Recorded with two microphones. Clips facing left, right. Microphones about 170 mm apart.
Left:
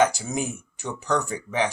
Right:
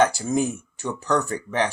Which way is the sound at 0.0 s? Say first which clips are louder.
Right 1 dB; 15° left (ahead or behind).